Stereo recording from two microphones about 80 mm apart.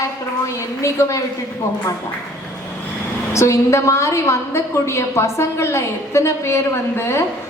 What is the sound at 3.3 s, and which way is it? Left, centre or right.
A woman's voice, left.